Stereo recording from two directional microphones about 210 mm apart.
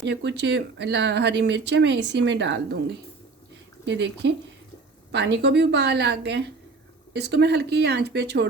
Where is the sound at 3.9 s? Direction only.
55° right (ahead or behind).